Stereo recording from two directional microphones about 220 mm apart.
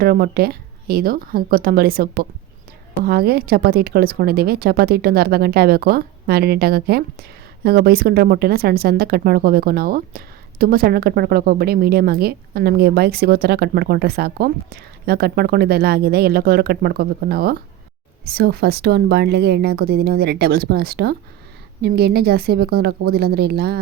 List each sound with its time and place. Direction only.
0.0 s speech: 40° right (ahead or behind)